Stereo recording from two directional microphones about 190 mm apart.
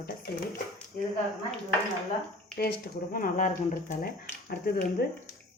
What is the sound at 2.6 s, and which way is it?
Speech, 50° left (ahead or behind).